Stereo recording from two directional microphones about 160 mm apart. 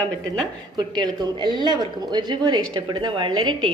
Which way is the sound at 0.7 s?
25° right (ahead or behind).